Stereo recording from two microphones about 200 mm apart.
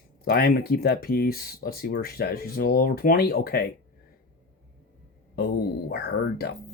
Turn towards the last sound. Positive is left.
turn(degrees=50)  # may be behind; listen again after turning